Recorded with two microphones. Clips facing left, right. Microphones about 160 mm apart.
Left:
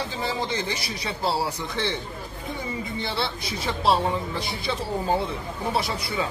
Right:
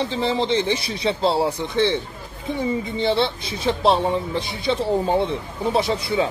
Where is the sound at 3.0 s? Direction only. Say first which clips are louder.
Right 10 dB; 25° right (ahead or behind).